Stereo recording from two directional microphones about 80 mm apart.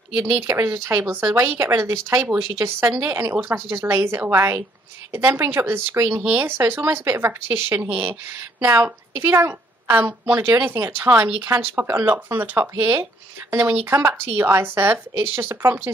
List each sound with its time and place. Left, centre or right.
0.4 s speech: right